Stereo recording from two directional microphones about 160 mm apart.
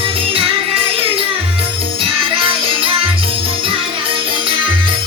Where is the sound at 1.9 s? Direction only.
35° right (ahead or behind).